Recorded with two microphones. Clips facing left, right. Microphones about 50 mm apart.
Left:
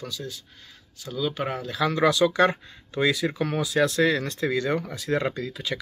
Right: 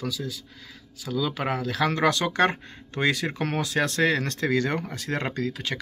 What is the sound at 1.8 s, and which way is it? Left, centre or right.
Speech, right.